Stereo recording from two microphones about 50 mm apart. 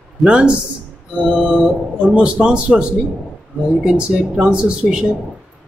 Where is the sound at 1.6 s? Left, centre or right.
Centre.